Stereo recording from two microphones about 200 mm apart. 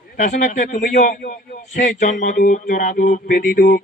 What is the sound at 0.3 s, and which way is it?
A man's voice, 40° left (ahead or behind).